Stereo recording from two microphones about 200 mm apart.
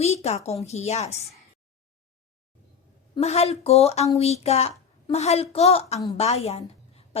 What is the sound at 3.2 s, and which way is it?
A woman's voice, 30° left (ahead or behind).